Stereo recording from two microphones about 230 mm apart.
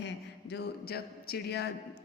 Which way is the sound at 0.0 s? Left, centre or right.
Left.